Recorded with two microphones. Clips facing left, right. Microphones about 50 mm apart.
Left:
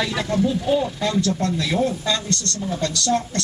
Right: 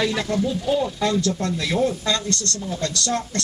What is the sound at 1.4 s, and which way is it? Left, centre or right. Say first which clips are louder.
Speech: left 2 dB; centre.